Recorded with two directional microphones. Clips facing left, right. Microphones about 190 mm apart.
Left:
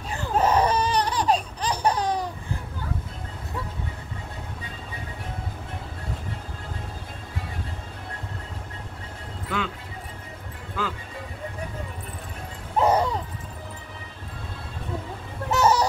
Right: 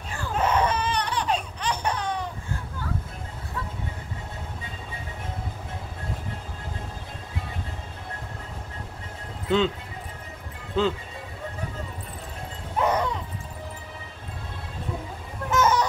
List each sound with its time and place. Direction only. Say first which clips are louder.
0.4 s laughter: left 3 dB; 35° left (ahead or behind)
9.5 s speech: right 8 dB; 25° right (ahead or behind)
10.8 s speech: right 7 dB; 25° right (ahead or behind)
12.7 s music: left 3 dB; 35° left (ahead or behind)
15.5 s a sound: left 1 dB; 35° left (ahead or behind)